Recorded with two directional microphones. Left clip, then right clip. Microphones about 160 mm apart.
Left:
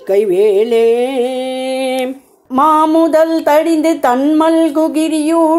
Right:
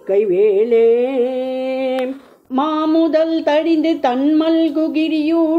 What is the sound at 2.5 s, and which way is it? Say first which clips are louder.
Speech: left 7 dB; 25° left (ahead or behind).